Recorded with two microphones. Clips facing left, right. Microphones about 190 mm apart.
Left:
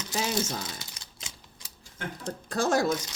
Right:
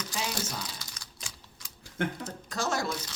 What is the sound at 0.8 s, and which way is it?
Typing, 25° left (ahead or behind).